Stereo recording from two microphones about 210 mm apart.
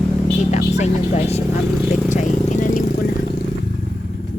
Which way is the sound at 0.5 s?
30° left (ahead or behind).